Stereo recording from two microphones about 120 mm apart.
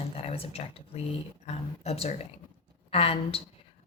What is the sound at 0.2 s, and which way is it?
Speech, 55° left (ahead or behind).